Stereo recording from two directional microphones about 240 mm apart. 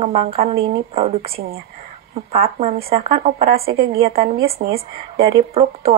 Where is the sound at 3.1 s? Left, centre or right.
Right.